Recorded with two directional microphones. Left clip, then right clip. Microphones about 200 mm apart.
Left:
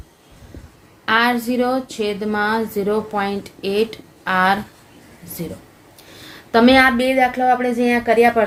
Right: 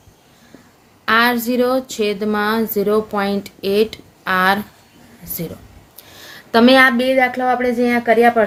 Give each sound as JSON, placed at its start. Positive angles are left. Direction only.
{"t": 1.0, "sound": "a woman's voice", "side_deg": -30}